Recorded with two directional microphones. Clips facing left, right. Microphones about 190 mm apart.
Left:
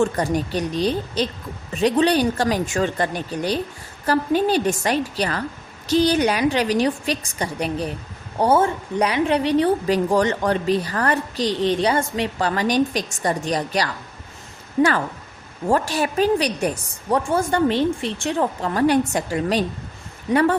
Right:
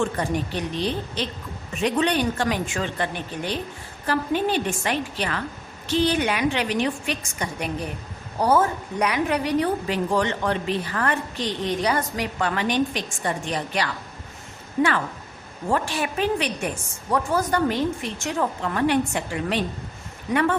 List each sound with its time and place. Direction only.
0.0 s a woman's voice: 40° left (ahead or behind)